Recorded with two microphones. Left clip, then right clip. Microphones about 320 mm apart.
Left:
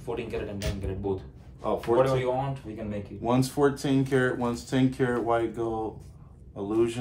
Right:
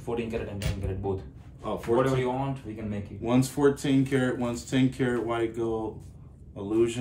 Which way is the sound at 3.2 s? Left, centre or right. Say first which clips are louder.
Even; centre.